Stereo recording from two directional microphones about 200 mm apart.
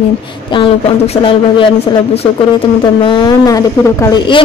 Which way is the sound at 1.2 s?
25° left (ahead or behind).